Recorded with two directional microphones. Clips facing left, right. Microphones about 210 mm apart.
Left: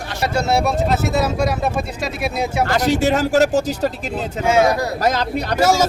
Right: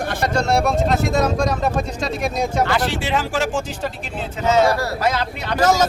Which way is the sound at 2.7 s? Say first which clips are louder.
Left 4 dB; 40° left (ahead or behind).